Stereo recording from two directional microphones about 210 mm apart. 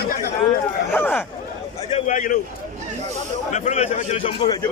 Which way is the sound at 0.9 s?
10° left (ahead or behind).